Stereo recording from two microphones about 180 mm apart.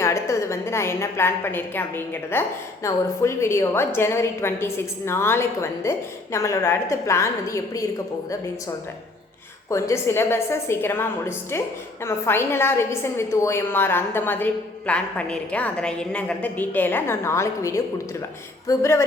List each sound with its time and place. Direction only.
0.0 s a woman's voice: 15° left (ahead or behind)
9.6 s a woman's voice: 15° left (ahead or behind)